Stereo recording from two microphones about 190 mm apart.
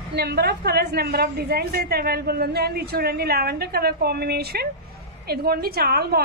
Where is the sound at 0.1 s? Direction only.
60° right (ahead or behind).